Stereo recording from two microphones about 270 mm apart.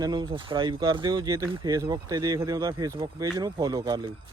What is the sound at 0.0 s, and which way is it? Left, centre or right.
Speech, centre.